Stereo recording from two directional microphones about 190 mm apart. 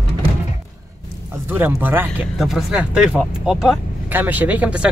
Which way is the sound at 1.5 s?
10° right (ahead or behind).